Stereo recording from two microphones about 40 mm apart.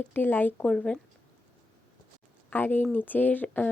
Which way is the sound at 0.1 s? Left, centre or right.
Left.